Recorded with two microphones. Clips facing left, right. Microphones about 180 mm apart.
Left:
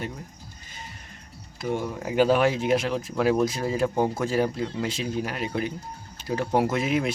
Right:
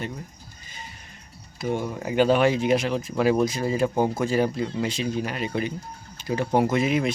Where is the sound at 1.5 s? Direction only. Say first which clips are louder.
Right 1 dB; centre (ahead or behind).